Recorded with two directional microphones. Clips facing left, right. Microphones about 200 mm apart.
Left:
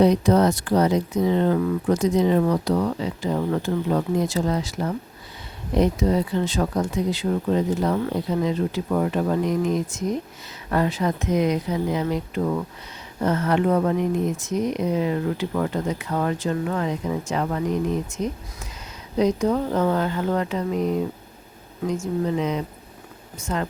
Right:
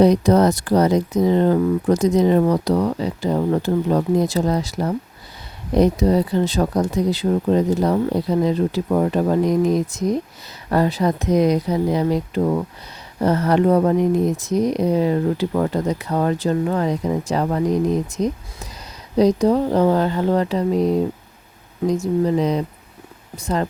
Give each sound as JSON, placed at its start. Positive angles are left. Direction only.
{"t": 0.0, "sound": "speech", "side_deg": -40}